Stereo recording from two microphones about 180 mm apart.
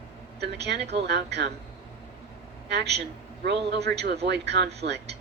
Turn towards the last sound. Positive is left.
turn(degrees=-70)  # may be behind; listen again after turning